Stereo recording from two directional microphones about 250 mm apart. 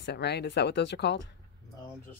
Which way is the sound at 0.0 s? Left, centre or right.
Left.